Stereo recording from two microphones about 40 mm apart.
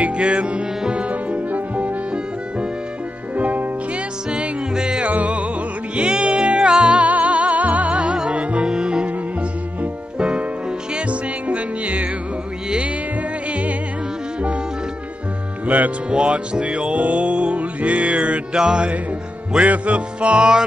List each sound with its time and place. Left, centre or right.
0.0 s music: right
3.3 s music: right
4.3 s music: right
5.0 s music: right
5.9 s music: right
10.1 s music: right
13.5 s music: right
15.6 s music: right
16.2 s music: right
18.5 s music: right